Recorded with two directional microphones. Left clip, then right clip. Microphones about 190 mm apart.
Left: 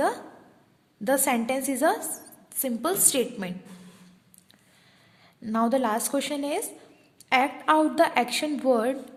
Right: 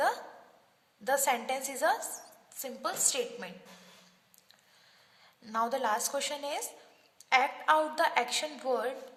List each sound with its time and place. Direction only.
1.0 s a woman's voice: 30° left (ahead or behind)
5.4 s a woman's voice: 25° left (ahead or behind)